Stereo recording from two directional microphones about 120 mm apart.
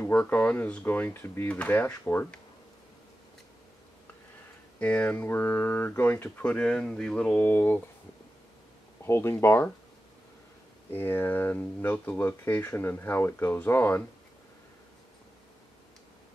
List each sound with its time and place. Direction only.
0.0 s speech: 15° left (ahead or behind)
4.7 s speech: 15° left (ahead or behind)
9.0 s speech: 20° left (ahead or behind)
10.9 s speech: 20° left (ahead or behind)